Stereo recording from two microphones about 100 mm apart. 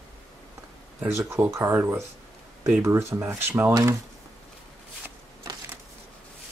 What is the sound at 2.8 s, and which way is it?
Speech, 30° right (ahead or behind).